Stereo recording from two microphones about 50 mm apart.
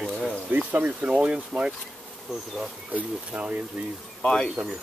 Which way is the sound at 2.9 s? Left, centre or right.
Right.